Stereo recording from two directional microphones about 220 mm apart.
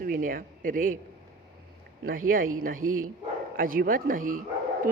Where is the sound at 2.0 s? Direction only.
40° right (ahead or behind).